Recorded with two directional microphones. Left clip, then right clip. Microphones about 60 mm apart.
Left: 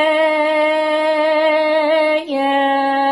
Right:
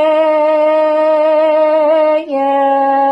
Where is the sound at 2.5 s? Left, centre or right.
Right.